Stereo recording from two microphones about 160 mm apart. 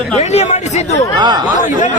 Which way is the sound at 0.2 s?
45° left (ahead or behind).